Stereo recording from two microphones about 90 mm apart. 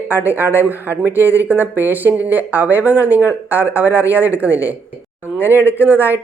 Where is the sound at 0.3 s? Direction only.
20° right (ahead or behind).